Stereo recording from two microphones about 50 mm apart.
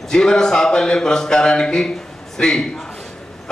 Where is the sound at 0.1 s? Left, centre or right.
Centre.